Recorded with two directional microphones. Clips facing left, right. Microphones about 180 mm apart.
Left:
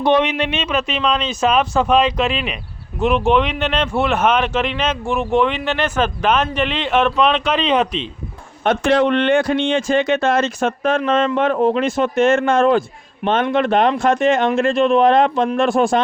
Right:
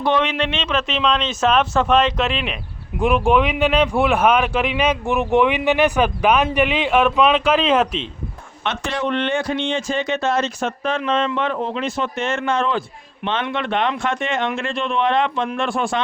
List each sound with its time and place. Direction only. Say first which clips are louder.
0.0 s speech: left 3 dB; 15° left (ahead or behind); by 2.6 s centre (ahead or behind)
3.0 s a man's voice: left 1 dB; 10° right (ahead or behind)
8.6 s speech: left 8 dB; 50° left (ahead or behind)